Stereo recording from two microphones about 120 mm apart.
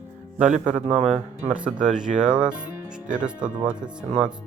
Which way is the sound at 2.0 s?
90° right.